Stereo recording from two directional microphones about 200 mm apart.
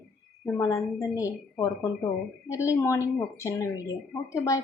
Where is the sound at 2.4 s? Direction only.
15° left (ahead or behind).